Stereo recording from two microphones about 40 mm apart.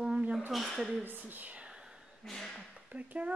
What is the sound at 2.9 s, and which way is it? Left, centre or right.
Speech, right.